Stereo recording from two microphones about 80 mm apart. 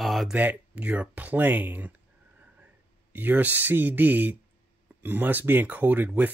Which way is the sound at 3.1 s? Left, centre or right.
Right.